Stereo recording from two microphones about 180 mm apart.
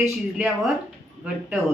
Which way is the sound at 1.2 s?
5° right (ahead or behind).